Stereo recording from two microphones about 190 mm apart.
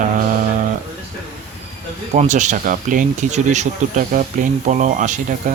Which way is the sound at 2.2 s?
40° right (ahead or behind).